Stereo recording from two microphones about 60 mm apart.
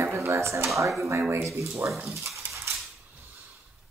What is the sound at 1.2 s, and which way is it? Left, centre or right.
Speech, right.